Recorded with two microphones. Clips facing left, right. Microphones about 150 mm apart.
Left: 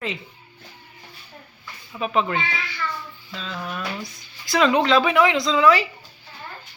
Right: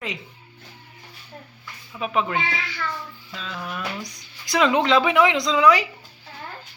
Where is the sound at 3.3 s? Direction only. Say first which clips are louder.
Left 2 dB; 10° right (ahead or behind).